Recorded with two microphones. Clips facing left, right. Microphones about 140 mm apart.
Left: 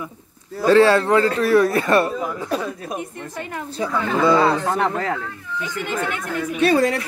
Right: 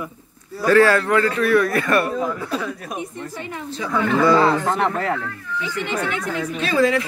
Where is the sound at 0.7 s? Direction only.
25° left (ahead or behind).